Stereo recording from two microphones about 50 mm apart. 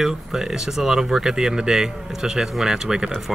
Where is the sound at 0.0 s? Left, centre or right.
Centre.